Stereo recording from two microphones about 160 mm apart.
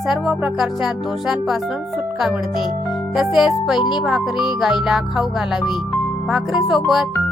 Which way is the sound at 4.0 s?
Centre (ahead or behind).